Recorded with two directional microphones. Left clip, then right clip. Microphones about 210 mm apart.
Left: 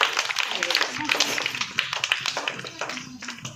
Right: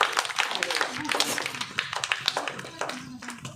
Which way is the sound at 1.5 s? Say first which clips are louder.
Left 4 dB; 55° right (ahead or behind).